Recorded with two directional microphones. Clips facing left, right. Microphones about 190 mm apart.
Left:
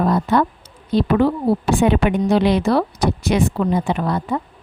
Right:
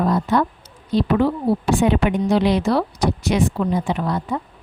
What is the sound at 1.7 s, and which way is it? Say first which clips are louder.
Speech: left 1 dB; 55° left (ahead or behind).